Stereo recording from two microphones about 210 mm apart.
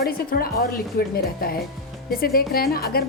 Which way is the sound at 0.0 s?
45° left (ahead or behind).